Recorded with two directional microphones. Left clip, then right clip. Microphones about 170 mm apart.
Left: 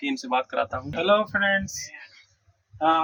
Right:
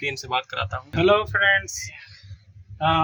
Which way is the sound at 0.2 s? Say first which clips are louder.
Left 1 dB; 30° right (ahead or behind).